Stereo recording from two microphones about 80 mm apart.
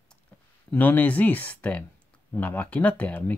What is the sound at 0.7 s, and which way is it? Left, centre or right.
Speech, left.